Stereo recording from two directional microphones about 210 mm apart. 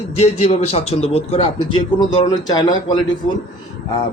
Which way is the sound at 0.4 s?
30° left (ahead or behind).